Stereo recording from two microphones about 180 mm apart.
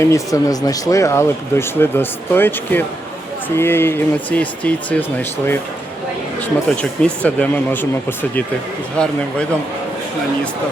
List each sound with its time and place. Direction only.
0.0 s speech: 15° left (ahead or behind)
6.7 s speech: 5° left (ahead or behind)
9.0 s speech: 5° left (ahead or behind)